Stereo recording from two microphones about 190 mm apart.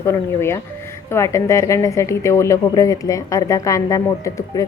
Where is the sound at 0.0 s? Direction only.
15° left (ahead or behind).